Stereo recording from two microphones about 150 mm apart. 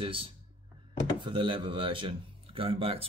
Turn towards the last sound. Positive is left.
turn(degrees=-40)  # may be behind; listen again after turning